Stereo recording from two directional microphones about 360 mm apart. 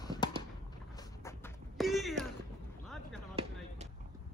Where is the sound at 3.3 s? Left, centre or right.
Centre.